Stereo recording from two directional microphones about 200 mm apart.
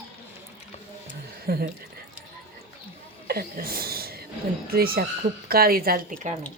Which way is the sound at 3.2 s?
50° right (ahead or behind).